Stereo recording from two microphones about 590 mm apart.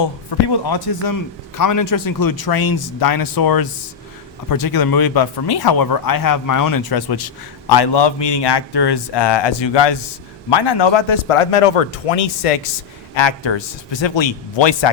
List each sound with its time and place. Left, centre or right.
0.3 s a man's voice: left
13.1 s a man's voice: left